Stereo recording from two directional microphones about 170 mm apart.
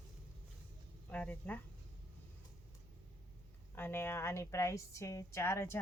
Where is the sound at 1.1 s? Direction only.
10° left (ahead or behind).